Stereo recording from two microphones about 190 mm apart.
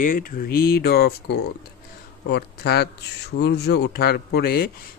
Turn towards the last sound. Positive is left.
turn(degrees=55)  # may be behind; listen again after turning